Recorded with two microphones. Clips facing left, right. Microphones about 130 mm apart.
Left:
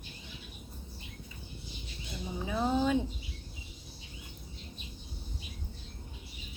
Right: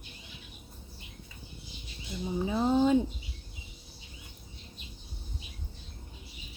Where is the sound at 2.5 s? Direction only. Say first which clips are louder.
Right 4 dB; 30° right (ahead or behind).